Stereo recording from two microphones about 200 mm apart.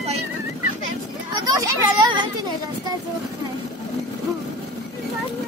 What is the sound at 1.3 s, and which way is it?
Children playing, 20° right (ahead or behind).